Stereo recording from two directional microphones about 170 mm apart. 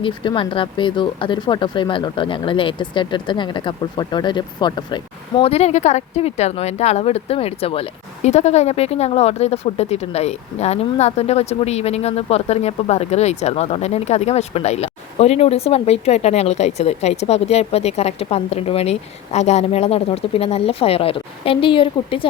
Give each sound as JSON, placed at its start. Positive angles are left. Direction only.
{"t": 0.0, "sound": "speech", "side_deg": 30}
{"t": 5.4, "sound": "speech", "side_deg": 35}